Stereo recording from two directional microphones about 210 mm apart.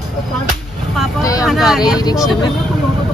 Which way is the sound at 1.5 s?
Centre (ahead or behind).